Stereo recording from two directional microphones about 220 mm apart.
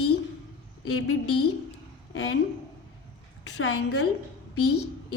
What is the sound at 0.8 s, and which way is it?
A woman's voice, 75° left (ahead or behind).